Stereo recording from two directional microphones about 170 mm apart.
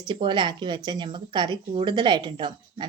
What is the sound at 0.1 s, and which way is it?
A woman's voice, 25° right (ahead or behind).